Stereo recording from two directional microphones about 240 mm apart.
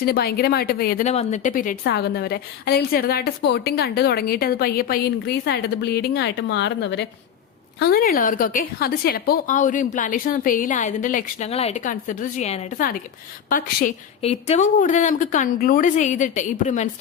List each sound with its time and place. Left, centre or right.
0.0 s a woman's voice: left